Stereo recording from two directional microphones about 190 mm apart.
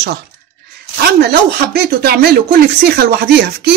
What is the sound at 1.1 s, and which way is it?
Speech, 55° right (ahead or behind).